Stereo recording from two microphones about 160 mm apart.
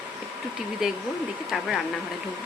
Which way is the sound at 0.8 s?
5° right (ahead or behind).